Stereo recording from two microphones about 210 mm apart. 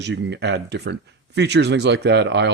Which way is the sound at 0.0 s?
55° right (ahead or behind).